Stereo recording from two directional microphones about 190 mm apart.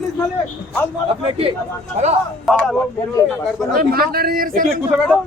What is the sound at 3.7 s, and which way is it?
Speech, 50° right (ahead or behind).